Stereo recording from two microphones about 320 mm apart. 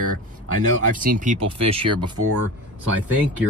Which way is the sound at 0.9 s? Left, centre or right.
Right.